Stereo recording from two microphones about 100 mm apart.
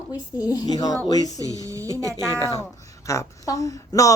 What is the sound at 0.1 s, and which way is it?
A woman's voice, 40° left (ahead or behind).